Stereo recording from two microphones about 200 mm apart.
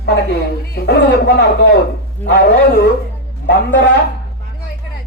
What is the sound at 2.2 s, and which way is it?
A man's voice, 55° left (ahead or behind).